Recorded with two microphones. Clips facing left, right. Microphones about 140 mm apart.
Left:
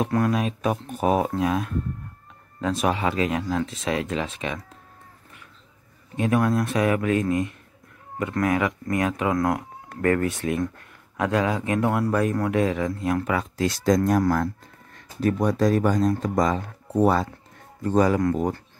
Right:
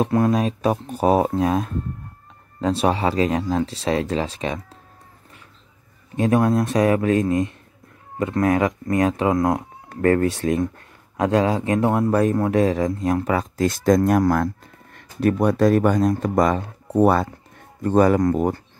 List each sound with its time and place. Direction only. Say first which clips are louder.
0.1 s speech: right 4 dB; 30° right (ahead or behind)
6.1 s speech: right 4 dB; 35° right (ahead or behind); by 18.2 s 55° right (ahead or behind)